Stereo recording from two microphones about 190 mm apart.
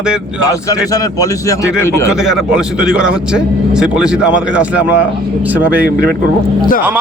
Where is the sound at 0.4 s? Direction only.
20° left (ahead or behind).